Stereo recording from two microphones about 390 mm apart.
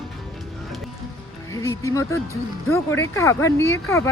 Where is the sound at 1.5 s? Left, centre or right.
Centre.